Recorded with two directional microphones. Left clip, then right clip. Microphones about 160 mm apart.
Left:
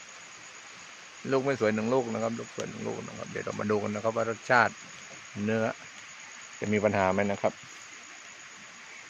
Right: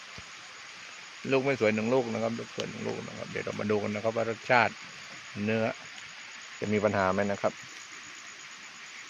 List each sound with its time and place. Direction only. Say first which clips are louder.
1.3 s speech: right 1 dB; 20° right (ahead or behind); by 7.3 s 15° left (ahead or behind)